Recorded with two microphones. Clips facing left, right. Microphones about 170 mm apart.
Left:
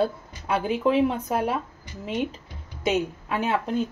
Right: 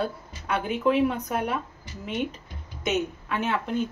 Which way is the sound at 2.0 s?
30° left (ahead or behind).